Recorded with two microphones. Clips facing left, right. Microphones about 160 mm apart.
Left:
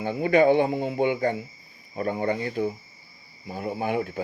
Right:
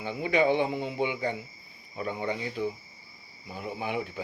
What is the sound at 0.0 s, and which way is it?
Speech, 50° left (ahead or behind).